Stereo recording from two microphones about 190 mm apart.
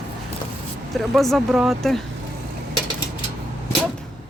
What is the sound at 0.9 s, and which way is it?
Speech, centre (ahead or behind).